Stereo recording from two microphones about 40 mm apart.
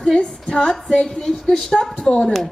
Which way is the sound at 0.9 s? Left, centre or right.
Centre.